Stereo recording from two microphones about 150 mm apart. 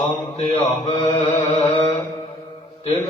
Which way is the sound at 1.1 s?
40° left (ahead or behind).